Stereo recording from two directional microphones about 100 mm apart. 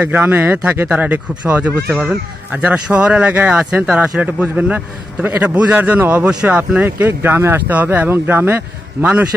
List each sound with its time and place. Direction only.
0.0 s speech: 20° right (ahead or behind)
1.9 s speech: centre (ahead or behind)
2.5 s speech: 10° right (ahead or behind)